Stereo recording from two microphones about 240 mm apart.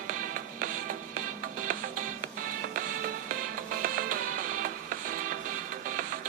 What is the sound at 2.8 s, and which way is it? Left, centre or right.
Music, right.